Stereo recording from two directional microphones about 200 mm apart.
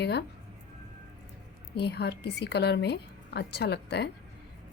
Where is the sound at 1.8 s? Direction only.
55° left (ahead or behind).